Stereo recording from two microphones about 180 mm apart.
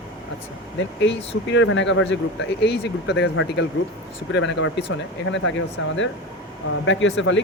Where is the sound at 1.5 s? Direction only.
90° left.